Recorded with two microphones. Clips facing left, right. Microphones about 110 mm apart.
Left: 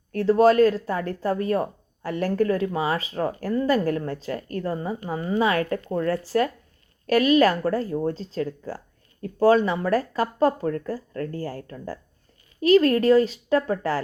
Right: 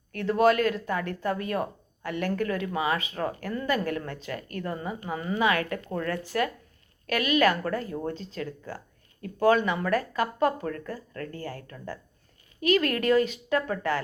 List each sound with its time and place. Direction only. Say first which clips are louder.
0.1 s speech: left 5 dB; 35° left (ahead or behind)